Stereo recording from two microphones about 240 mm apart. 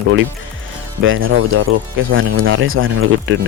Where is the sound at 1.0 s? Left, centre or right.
Right.